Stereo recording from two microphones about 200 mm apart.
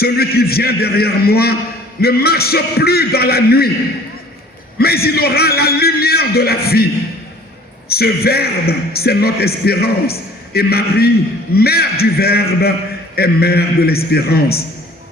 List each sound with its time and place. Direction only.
0.0 s a man's voice: 50° left (ahead or behind)
4.8 s a man's voice: 50° left (ahead or behind)
7.9 s a man's voice: 50° left (ahead or behind)